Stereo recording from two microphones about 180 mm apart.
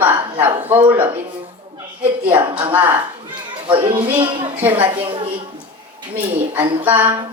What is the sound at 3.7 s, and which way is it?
Speech, 30° right (ahead or behind).